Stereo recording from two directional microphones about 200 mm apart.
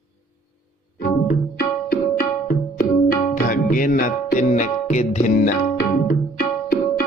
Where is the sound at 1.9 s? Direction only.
45° left (ahead or behind).